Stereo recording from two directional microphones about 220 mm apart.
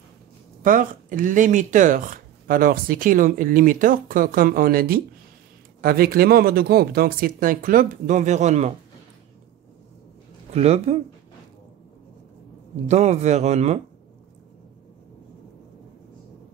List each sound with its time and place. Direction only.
0.6 s speech: 40° right (ahead or behind)
10.5 s speech: 30° right (ahead or behind)
12.8 s speech: 30° right (ahead or behind)